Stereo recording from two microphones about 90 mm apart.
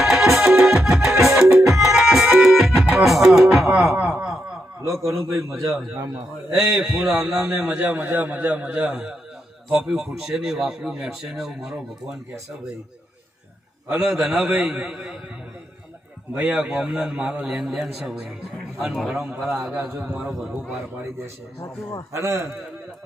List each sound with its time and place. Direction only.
0.0 s music: centre (ahead or behind)
3.9 s snicker: 10° right (ahead or behind)
5.3 s speech: 5° right (ahead or behind)
6.7 s a man's voice: 5° right (ahead or behind)
13.8 s a man's voice: 20° right (ahead or behind)
14.1 s a man's voice: 5° right (ahead or behind)
16.4 s a man's voice: 5° right (ahead or behind)
19.5 s a man's voice: 15° right (ahead or behind)
20.2 s speech: centre (ahead or behind)
21.6 s a man's voice: 35° left (ahead or behind)
22.1 s a man's voice: 35° right (ahead or behind)